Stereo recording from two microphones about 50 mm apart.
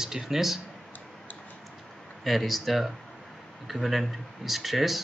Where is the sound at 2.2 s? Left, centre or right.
Centre.